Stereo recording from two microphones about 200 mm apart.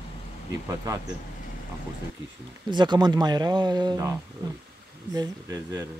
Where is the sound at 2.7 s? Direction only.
20° right (ahead or behind).